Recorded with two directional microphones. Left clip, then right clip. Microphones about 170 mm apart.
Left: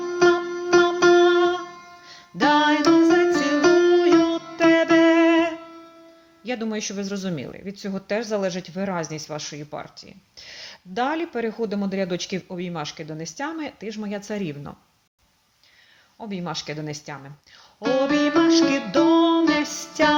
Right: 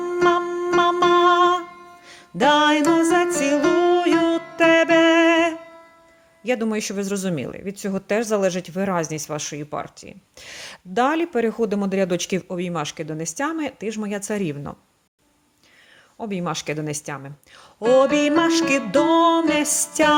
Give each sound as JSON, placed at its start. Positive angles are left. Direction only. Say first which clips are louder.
{"t": 0.3, "sound": "music", "louder": "right 1 dB", "side_deg": -35}
{"t": 6.4, "sound": "speech", "louder": "right 5 dB", "side_deg": -40}
{"t": 16.1, "sound": "music", "louder": "right 4 dB", "side_deg": -40}